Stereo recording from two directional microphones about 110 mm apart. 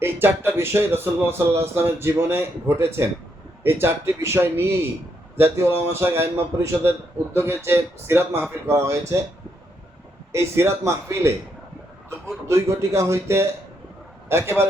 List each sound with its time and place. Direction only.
0.0 s speech: 20° right (ahead or behind)
10.3 s speech: 25° right (ahead or behind)
12.5 s speech: 25° right (ahead or behind)